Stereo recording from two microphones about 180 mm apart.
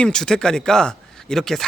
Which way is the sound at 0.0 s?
5° left (ahead or behind).